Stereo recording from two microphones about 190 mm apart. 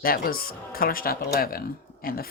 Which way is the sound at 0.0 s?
50° left (ahead or behind).